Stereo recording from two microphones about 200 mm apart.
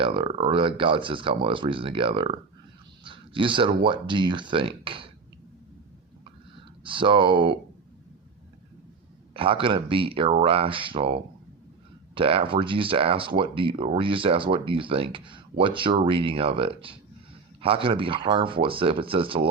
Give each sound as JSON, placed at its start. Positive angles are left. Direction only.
{"t": 0.0, "sound": "speech", "side_deg": -25}
{"t": 3.0, "sound": "a sound", "side_deg": -25}
{"t": 3.8, "sound": "speech", "side_deg": -25}
{"t": 6.8, "sound": "speech", "side_deg": -25}
{"t": 9.3, "sound": "speech", "side_deg": -25}